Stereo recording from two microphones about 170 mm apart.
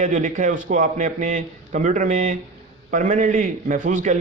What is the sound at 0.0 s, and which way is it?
A man's voice, 50° right (ahead or behind).